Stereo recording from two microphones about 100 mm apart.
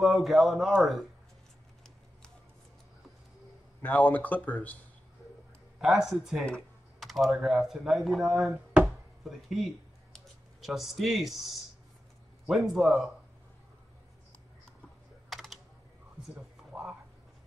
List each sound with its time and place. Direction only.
0.0 s speech: centre (ahead or behind)
3.8 s speech: 15° left (ahead or behind)
5.8 s speech: 5° right (ahead or behind)
8.8 s chopping: centre (ahead or behind)
12.4 s speech: centre (ahead or behind)
15.2 s typing: centre (ahead or behind)
16.3 s a sound: 5° right (ahead or behind)